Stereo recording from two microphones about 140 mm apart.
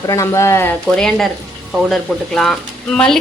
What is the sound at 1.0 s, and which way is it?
Speech, 5° left (ahead or behind).